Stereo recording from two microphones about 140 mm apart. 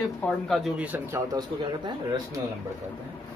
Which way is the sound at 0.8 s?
10° right (ahead or behind).